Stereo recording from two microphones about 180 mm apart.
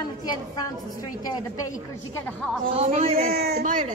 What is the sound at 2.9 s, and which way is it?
Speech, 55° right (ahead or behind).